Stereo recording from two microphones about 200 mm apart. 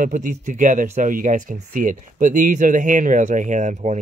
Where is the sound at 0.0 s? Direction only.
40° right (ahead or behind).